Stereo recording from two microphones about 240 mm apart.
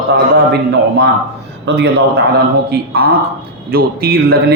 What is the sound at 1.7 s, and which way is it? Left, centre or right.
A man's voice, right.